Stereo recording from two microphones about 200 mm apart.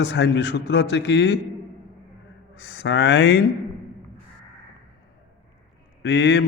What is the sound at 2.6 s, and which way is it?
Speech, 60° left (ahead or behind).